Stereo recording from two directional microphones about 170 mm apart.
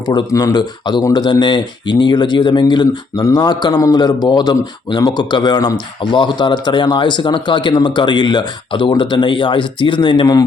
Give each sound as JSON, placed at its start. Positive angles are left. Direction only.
{"t": 0.1, "sound": "speech", "side_deg": 25}